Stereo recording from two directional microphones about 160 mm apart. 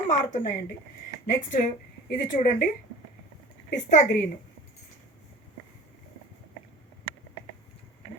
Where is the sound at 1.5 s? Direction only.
60° left (ahead or behind).